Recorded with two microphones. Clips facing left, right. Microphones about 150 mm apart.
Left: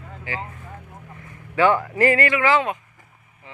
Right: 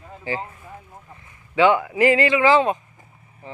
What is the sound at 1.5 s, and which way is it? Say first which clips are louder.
A man's voice: right 1 dB; 15° right (ahead or behind).